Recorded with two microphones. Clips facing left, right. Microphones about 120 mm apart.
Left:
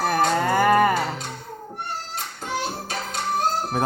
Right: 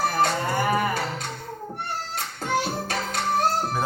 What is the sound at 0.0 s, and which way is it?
Music, 65° left (ahead or behind).